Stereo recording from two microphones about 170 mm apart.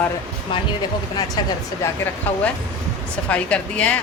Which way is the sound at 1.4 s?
25° left (ahead or behind).